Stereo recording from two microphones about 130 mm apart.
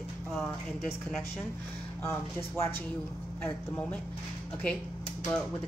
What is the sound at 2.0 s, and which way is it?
Speech, 20° left (ahead or behind).